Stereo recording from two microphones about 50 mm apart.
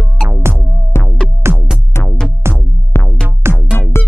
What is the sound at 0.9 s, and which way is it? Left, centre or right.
Music, left.